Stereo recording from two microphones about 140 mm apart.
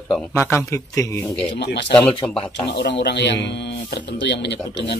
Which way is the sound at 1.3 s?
5° left (ahead or behind).